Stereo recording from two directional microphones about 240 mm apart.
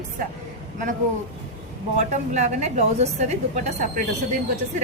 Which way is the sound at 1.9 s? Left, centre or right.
Right.